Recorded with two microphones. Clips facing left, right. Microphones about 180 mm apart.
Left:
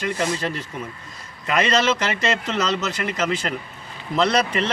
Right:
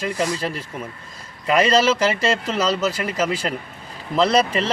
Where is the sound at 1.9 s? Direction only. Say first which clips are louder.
Right 3 dB; 30° right (ahead or behind).